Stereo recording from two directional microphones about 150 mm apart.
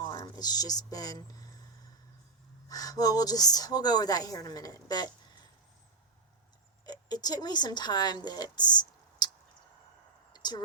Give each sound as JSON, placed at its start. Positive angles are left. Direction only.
{"t": 0.1, "sound": "speech", "side_deg": 25}
{"t": 2.6, "sound": "a woman's voice", "side_deg": 25}
{"t": 6.8, "sound": "speech", "side_deg": 25}
{"t": 10.3, "sound": "a sound", "side_deg": 30}